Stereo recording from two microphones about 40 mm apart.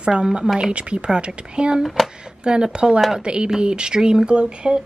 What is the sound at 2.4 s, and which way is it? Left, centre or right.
Speech, centre.